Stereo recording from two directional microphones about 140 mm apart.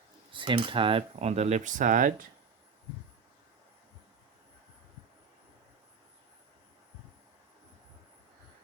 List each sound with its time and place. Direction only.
0.3 s speech: 35° right (ahead or behind); by 2.2 s 70° right (ahead or behind)